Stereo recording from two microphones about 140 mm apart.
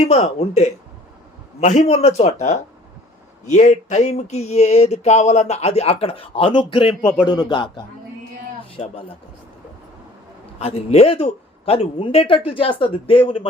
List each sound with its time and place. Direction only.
0.1 s speech: 50° left (ahead or behind)
10.6 s speech: 45° left (ahead or behind)